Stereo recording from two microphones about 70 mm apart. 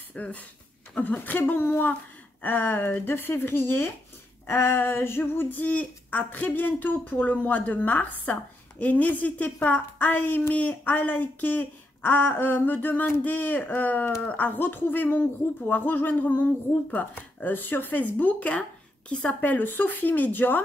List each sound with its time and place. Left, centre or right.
0.1 s speech: centre